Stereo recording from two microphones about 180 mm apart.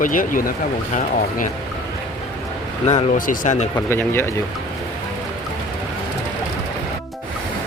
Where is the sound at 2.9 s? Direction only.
50° left (ahead or behind).